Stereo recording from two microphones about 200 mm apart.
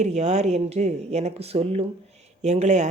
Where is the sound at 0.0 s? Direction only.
35° right (ahead or behind).